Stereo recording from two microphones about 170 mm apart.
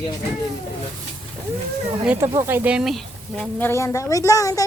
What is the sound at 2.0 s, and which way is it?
Speech, 10° right (ahead or behind).